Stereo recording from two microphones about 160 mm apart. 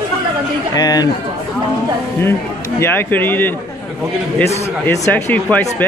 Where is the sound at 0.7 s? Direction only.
25° left (ahead or behind).